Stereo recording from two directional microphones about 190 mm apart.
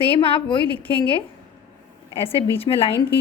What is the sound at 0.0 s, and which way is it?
Speech, 30° left (ahead or behind).